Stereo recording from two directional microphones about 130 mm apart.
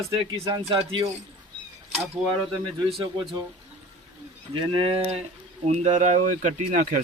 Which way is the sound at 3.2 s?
40° right (ahead or behind).